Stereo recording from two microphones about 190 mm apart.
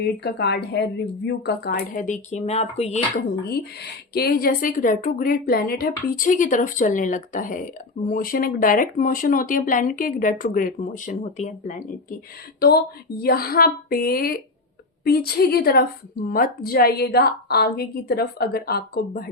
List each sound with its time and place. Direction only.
0.0 s a woman's voice: 60° left (ahead or behind); by 3.2 s 35° left (ahead or behind)
4.1 s a woman's voice: 55° left (ahead or behind)
12.5 s a woman's voice: 55° left (ahead or behind)